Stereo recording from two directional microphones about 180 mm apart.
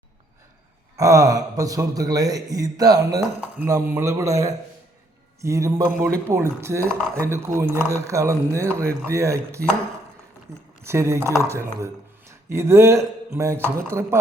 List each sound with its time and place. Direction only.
0.9 s speech: 20° right (ahead or behind)